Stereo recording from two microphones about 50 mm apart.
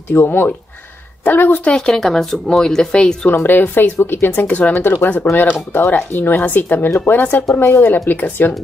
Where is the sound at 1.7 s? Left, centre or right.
Centre.